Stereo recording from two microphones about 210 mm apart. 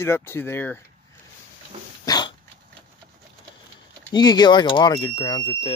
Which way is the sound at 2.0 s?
20° left (ahead or behind).